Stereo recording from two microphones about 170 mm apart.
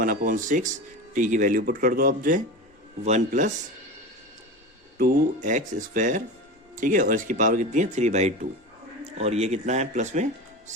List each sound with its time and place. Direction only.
0.0 s speech: 55° right (ahead or behind)
4.9 s speech: 50° right (ahead or behind)